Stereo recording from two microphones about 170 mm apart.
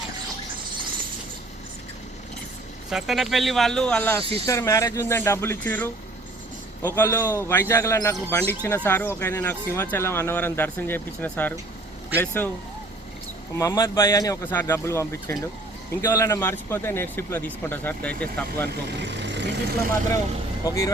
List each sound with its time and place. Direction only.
2.9 s a man's voice: centre (ahead or behind)
13.6 s a man's voice: 20° left (ahead or behind)
18.7 s speech: 85° right
20.7 s a man's voice: 20° left (ahead or behind)